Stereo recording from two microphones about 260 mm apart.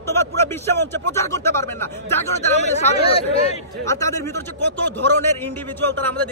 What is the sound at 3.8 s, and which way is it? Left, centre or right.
Speech, centre.